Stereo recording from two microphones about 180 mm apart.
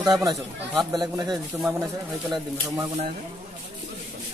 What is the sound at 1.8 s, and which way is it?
Speech, 20° right (ahead or behind).